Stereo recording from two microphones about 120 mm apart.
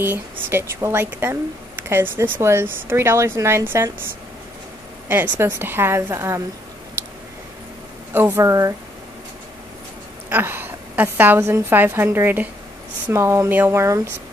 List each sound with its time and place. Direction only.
0.0 s speech: 20° right (ahead or behind)
5.0 s speech: 20° right (ahead or behind)
8.1 s speech: 15° right (ahead or behind)
10.3 s a woman's voice: 15° right (ahead or behind)